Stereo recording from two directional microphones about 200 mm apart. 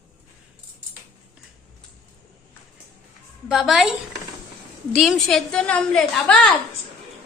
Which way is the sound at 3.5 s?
Centre (ahead or behind).